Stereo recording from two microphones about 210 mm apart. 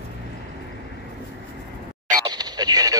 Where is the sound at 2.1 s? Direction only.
20° right (ahead or behind).